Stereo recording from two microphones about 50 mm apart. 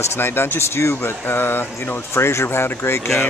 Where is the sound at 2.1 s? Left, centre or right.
Left.